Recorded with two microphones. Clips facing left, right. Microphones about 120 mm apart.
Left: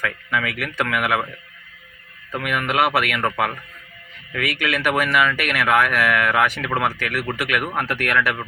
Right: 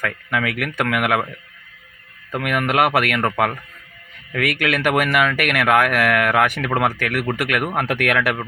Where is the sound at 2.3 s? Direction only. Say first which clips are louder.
Right 3 dB; 50° right (ahead or behind).